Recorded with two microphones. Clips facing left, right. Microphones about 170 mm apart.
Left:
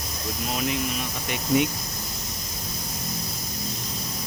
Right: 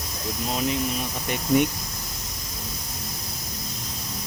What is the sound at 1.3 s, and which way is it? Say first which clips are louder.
Speech: right 2 dB; 50° right (ahead or behind).